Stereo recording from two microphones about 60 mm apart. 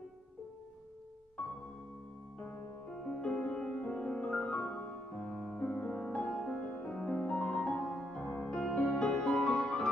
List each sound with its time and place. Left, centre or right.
2.3 s music: centre
6.2 s music: centre
6.6 s music: left